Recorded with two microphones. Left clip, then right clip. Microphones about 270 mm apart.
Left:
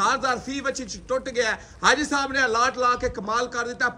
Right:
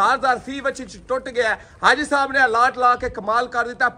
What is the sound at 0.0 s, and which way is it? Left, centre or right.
A man's voice, centre.